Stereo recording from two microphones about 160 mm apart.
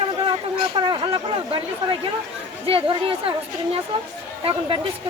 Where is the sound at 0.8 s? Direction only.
30° right (ahead or behind).